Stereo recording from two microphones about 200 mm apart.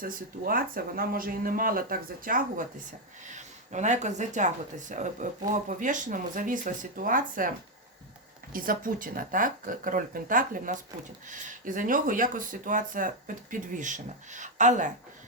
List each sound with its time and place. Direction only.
0.0 s speech: 45° right (ahead or behind)
8.5 s speech: 45° right (ahead or behind)